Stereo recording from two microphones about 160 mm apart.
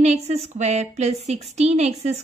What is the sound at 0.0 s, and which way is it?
A woman's voice, 45° right (ahead or behind).